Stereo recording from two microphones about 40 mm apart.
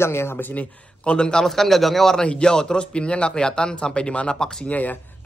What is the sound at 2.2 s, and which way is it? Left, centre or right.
A man's voice, left.